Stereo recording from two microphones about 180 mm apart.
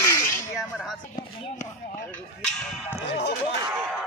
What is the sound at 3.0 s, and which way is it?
Speech, 70° left (ahead or behind).